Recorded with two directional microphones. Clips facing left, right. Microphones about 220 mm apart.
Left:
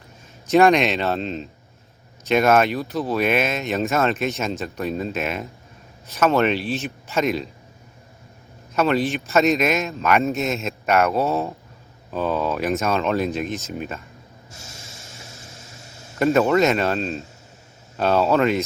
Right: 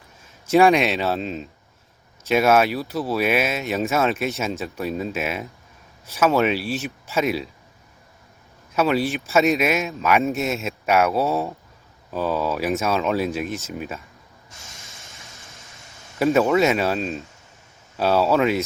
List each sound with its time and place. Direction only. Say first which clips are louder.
0.5 s speech: even; 5° right (ahead or behind)
8.7 s speech: left 1 dB; 10° right (ahead or behind)
14.7 s a sound: left 3 dB; 30° left (ahead or behind)
16.1 s speech: even; 5° right (ahead or behind)